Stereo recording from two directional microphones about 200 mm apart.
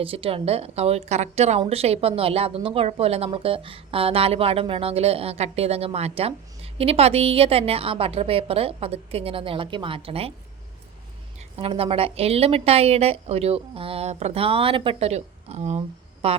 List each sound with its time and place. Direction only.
0.0 s a woman's voice: 25° right (ahead or behind)
11.3 s a woman's voice: 30° right (ahead or behind)